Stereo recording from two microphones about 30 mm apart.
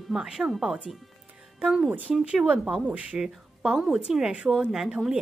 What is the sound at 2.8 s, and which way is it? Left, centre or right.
Speech, right.